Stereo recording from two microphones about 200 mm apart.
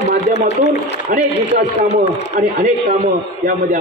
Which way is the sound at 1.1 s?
45° right (ahead or behind).